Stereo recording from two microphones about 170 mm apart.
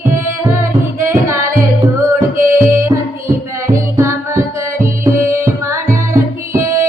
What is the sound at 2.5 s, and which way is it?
Music, 15° right (ahead or behind).